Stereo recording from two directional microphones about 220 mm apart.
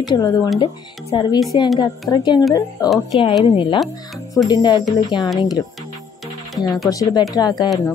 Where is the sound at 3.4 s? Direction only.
25° left (ahead or behind).